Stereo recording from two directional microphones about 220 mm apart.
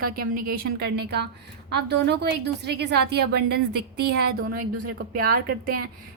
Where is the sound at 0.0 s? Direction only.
40° right (ahead or behind).